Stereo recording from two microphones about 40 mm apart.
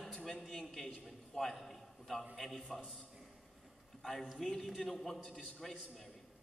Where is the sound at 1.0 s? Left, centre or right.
Centre.